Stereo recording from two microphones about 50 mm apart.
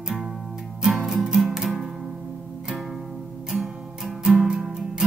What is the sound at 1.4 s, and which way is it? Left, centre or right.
Music, centre.